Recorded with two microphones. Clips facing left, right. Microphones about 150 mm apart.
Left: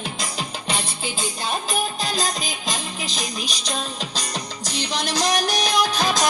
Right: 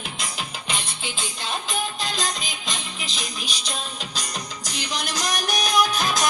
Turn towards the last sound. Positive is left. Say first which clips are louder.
# left 1 dB
turn(degrees=40)  # may be behind; listen again after turning